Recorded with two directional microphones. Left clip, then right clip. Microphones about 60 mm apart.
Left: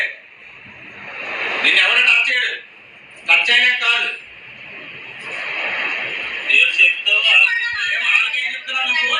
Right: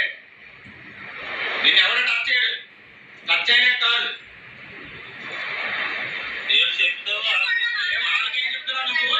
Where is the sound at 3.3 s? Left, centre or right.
Left.